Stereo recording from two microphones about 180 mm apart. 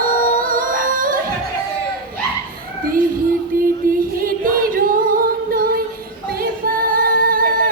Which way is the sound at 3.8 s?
50° right (ahead or behind).